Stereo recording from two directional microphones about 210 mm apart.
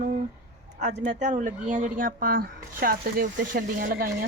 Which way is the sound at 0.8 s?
35° right (ahead or behind).